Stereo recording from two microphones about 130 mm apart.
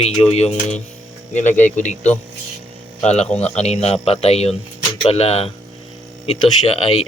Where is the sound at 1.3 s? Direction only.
70° left (ahead or behind).